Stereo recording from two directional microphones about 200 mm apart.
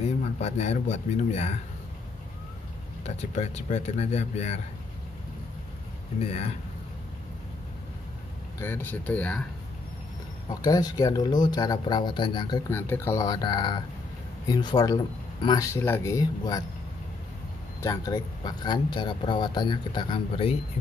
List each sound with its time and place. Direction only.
0.4 s speech: 35° left (ahead or behind)
3.2 s speech: 35° left (ahead or behind)
6.1 s speech: 30° left (ahead or behind)
8.5 s speech: 10° left (ahead or behind)
10.5 s speech: 20° left (ahead or behind)
17.8 s speech: 20° left (ahead or behind)